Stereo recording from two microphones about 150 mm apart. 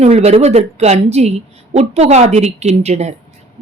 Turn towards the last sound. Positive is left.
turn(degrees=-45)  # may be behind; listen again after turning